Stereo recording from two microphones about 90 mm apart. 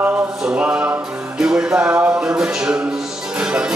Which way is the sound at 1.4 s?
10° right (ahead or behind).